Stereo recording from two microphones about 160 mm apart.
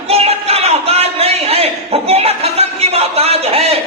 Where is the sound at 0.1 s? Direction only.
40° right (ahead or behind).